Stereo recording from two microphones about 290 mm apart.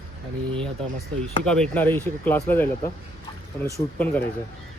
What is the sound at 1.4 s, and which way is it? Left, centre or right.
Speech, centre.